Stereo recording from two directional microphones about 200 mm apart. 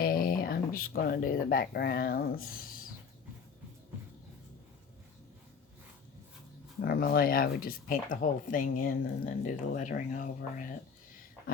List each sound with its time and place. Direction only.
0.0 s speech: 45° left (ahead or behind)
6.8 s speech: 50° left (ahead or behind)